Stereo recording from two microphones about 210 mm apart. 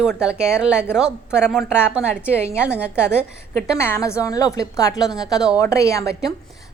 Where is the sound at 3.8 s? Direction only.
10° left (ahead or behind).